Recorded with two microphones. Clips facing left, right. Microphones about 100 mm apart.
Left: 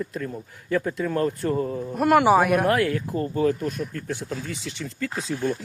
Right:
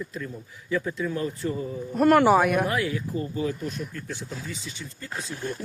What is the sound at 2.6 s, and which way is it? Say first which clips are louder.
Speech: left 4 dB; 55° left (ahead or behind).